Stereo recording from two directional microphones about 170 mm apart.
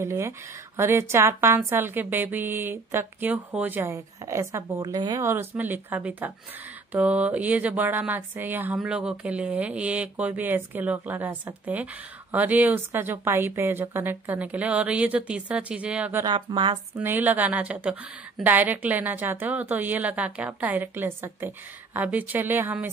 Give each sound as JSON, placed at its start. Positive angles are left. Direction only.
{"t": 0.0, "sound": "speech", "side_deg": -15}
{"t": 16.3, "sound": "a woman's voice", "side_deg": -30}
{"t": 16.9, "sound": "speech", "side_deg": -10}